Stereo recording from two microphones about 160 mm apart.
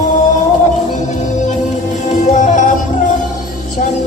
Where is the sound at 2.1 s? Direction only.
50° left (ahead or behind).